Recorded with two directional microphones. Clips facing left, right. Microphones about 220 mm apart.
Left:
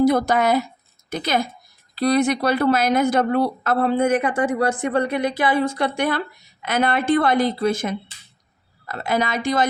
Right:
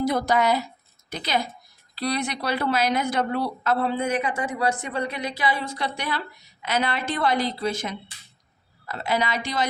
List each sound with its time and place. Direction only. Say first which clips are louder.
0.0 s a woman's voice: left 5 dB; 50° left (ahead or behind)